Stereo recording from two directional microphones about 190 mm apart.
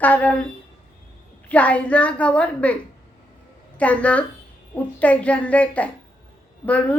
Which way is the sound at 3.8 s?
5° left (ahead or behind).